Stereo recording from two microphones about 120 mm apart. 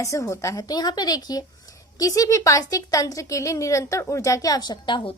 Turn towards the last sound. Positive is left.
turn(degrees=45)  # may be behind; listen again after turning